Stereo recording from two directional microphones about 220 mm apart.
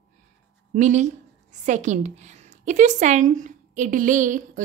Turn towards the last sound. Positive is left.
turn(degrees=-35)  # may be behind; listen again after turning